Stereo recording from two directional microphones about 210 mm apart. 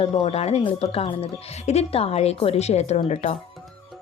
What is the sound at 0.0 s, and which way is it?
Speech, 25° left (ahead or behind).